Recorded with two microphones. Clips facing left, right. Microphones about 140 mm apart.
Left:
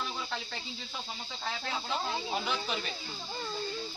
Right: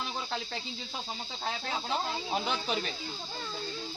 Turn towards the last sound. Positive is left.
turn(degrees=-35)  # may be behind; listen again after turning